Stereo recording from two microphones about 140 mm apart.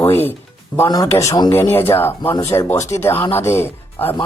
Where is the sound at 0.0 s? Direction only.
15° left (ahead or behind).